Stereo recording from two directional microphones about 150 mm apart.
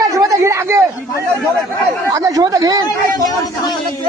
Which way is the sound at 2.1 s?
25° right (ahead or behind).